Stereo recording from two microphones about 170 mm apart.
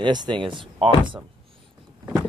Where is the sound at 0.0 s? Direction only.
25° right (ahead or behind).